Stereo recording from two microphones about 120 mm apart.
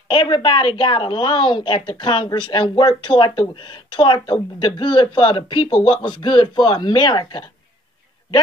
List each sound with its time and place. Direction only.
0.1 s a woman's voice: 45° left (ahead or behind)